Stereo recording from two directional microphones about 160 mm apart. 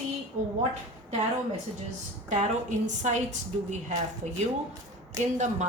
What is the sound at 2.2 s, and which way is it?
A woman's voice, 50° right (ahead or behind).